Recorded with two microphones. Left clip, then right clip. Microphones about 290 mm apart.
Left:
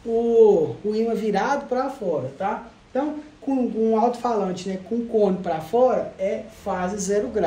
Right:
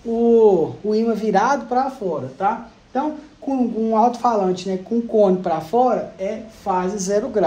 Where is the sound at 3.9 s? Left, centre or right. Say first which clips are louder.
Right 6 dB; centre.